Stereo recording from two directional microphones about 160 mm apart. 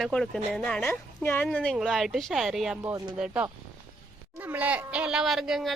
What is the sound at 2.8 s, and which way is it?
Speech, 20° right (ahead or behind).